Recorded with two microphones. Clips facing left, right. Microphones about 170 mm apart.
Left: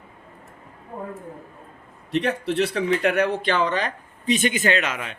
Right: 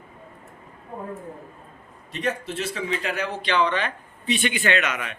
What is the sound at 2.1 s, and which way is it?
Speech, 65° left (ahead or behind).